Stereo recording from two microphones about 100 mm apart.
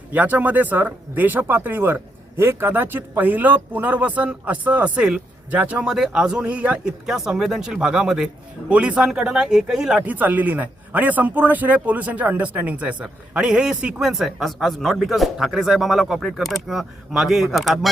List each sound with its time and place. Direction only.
0.1 s speech: 15° right (ahead or behind)
10.1 s a man's voice: 15° right (ahead or behind); by 17.7 s centre (ahead or behind)